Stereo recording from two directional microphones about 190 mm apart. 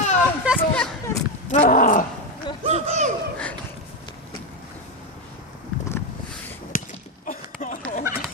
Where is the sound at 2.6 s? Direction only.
35° right (ahead or behind).